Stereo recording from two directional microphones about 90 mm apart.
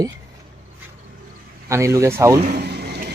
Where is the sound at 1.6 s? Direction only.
30° right (ahead or behind).